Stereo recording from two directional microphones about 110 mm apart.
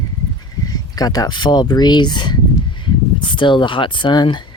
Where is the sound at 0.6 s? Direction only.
35° left (ahead or behind).